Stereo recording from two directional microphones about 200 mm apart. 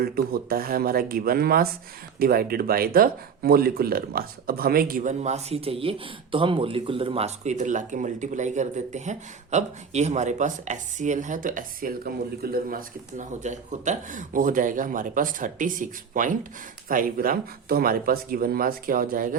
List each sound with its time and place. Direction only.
0.0 s speech: 50° right (ahead or behind)